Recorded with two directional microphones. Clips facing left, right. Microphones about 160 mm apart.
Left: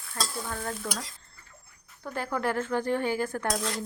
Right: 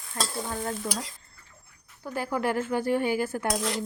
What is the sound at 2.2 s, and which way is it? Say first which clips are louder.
Speech: right 2 dB; 10° right (ahead or behind).